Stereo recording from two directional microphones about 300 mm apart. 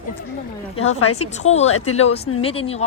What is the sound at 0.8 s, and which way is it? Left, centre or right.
A woman's voice, left.